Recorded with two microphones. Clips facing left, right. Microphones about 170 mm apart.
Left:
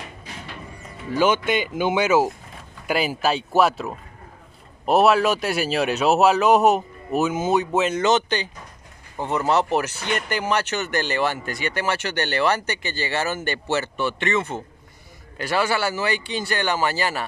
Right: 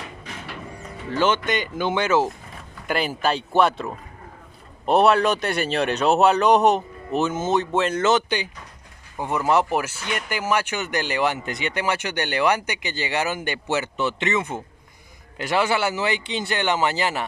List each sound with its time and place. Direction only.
1.1 s speech: 10° left (ahead or behind)
9.2 s speech: 10° right (ahead or behind)